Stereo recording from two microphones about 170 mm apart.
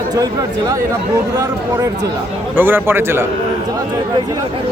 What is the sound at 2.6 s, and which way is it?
Speech, 10° right (ahead or behind).